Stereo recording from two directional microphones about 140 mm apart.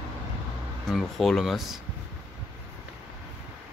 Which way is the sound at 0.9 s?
Centre (ahead or behind).